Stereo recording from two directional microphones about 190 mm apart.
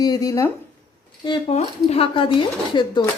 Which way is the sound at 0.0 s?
20° left (ahead or behind).